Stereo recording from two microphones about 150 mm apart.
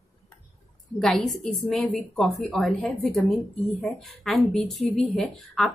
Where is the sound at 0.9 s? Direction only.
5° left (ahead or behind).